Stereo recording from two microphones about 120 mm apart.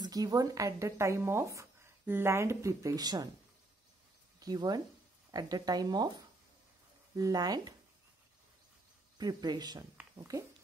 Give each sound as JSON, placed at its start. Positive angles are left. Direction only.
{"t": 0.0, "sound": "speech", "side_deg": -30}
{"t": 4.4, "sound": "speech", "side_deg": -30}
{"t": 9.2, "sound": "speech", "side_deg": -35}